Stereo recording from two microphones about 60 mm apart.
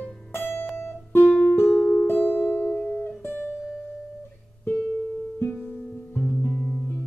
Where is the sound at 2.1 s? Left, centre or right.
Left.